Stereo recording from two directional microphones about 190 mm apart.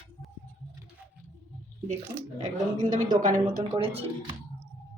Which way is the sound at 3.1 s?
45° right (ahead or behind).